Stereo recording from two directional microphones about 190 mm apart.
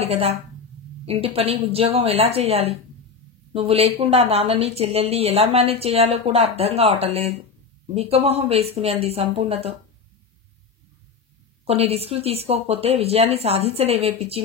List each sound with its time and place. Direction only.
0.0 s a woman's voice: 30° right (ahead or behind)
11.6 s a woman's voice: 30° right (ahead or behind)